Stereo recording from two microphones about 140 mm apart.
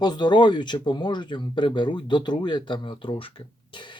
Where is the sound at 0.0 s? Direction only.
30° left (ahead or behind).